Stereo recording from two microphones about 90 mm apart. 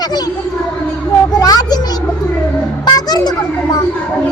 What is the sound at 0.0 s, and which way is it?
Speech, 50° left (ahead or behind).